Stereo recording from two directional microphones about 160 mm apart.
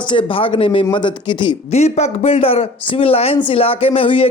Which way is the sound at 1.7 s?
45° left (ahead or behind).